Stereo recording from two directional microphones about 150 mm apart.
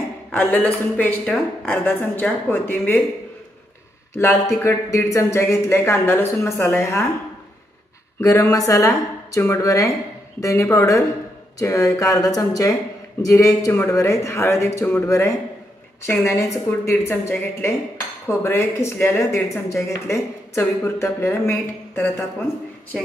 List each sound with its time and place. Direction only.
0.3 s speech: 10° left (ahead or behind)
4.1 s speech: 20° left (ahead or behind)
8.2 s a woman's voice: 20° left (ahead or behind)